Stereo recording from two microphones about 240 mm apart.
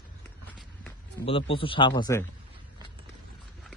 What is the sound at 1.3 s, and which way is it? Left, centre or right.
Speech, left.